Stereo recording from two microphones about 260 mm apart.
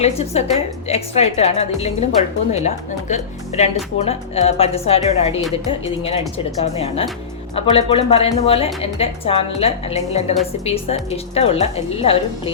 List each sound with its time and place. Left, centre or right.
0.0 s a woman's voice: left
11.3 s a woman's voice: left